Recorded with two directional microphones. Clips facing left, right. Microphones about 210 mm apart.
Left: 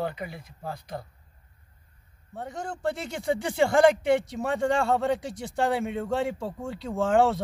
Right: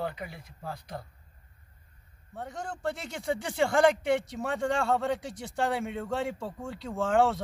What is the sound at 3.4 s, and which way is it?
Speech, 15° left (ahead or behind).